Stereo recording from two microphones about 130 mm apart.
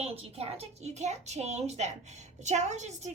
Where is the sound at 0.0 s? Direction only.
50° right (ahead or behind).